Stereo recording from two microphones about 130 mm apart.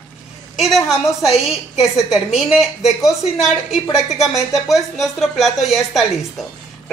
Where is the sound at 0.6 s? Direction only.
Centre (ahead or behind).